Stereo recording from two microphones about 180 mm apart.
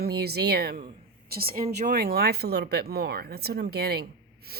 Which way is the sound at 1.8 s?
55° right (ahead or behind).